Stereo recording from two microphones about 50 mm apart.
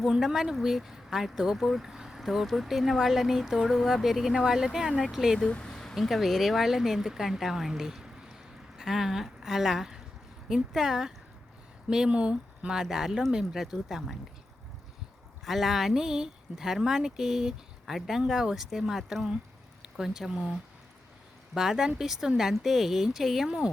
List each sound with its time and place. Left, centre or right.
0.0 s speech: centre
5.5 s speech: centre
5.7 s a sound: centre
6.0 s speech: centre
15.4 s speech: centre
21.5 s speech: centre